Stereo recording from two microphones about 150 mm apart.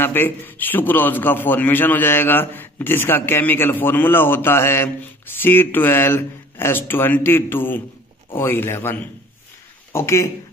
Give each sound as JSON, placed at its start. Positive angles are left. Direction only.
{"t": 0.0, "sound": "a man's voice", "side_deg": 15}